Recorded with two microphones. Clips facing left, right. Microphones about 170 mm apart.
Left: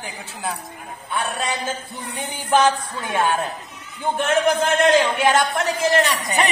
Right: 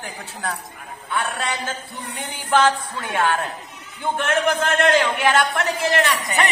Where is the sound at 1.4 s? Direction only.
15° left (ahead or behind).